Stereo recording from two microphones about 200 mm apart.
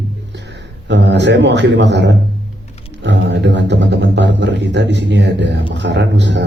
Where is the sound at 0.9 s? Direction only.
60° right (ahead or behind).